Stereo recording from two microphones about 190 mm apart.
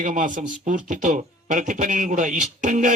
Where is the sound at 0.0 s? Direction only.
45° right (ahead or behind).